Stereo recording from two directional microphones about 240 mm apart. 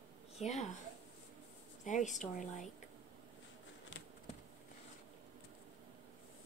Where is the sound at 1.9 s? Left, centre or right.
Left.